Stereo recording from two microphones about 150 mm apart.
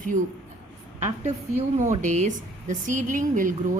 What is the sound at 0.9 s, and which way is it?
A woman's voice, 50° right (ahead or behind).